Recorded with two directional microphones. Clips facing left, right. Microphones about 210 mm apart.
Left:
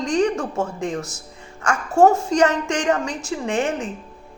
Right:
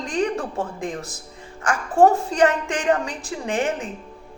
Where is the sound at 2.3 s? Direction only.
30° right (ahead or behind).